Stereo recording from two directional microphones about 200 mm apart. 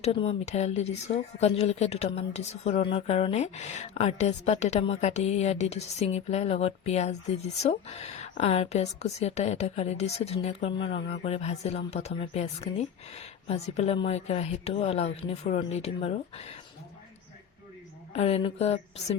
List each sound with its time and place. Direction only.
0.0 s a woman's voice: 30° left (ahead or behind)
18.1 s a woman's voice: 30° left (ahead or behind)